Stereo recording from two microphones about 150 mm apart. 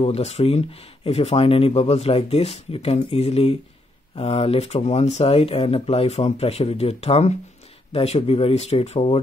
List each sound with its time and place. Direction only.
0.0 s speech: 45° left (ahead or behind)